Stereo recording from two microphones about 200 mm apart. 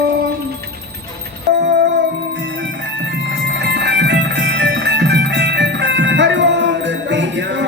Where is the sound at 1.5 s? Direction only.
60° right (ahead or behind).